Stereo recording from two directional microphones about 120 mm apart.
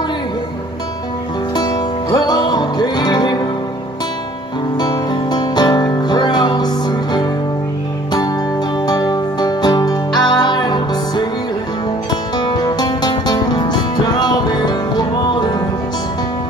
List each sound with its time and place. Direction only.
1.5 s music: 35° left (ahead or behind)
4.7 s music: 35° left (ahead or behind)
8.8 s music: 35° left (ahead or behind)
12.4 s music: 35° left (ahead or behind)